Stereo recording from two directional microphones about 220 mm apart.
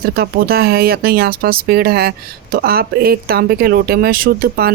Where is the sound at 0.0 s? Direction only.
45° right (ahead or behind).